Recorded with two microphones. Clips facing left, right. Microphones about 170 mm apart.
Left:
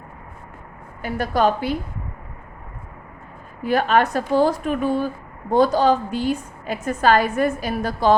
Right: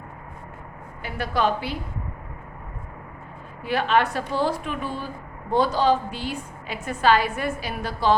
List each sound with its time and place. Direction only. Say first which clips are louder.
1.0 s a woman's voice: left 4 dB; 45° left (ahead or behind)
3.6 s a woman's voice: left 4 dB; 45° left (ahead or behind)